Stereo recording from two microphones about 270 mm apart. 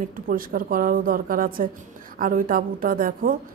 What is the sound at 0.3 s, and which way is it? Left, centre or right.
A woman's voice, right.